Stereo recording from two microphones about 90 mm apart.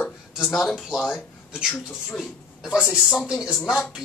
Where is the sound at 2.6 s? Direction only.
10° right (ahead or behind).